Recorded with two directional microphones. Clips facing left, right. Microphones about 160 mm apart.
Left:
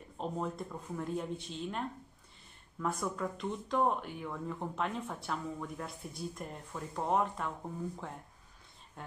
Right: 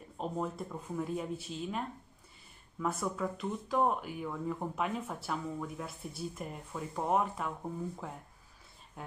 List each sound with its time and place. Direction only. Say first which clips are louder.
0.2 s speech: right 1 dB; 5° right (ahead or behind)